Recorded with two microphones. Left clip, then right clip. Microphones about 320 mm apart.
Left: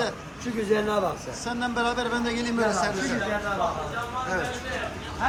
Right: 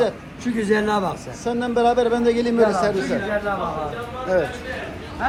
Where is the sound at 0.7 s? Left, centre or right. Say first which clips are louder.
Right 4 dB; right.